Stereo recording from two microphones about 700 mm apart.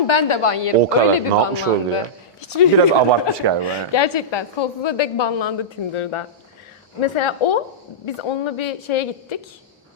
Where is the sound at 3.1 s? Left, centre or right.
Right.